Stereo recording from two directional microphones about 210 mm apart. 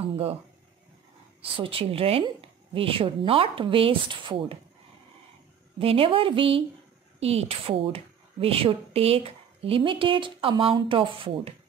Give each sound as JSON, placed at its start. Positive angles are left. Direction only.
{"t": 0.1, "sound": "a sound", "side_deg": -30}
{"t": 1.4, "sound": "speech", "side_deg": -25}
{"t": 5.8, "sound": "speech", "side_deg": -25}